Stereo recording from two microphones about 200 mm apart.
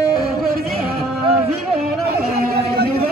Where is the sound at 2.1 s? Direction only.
50° right (ahead or behind).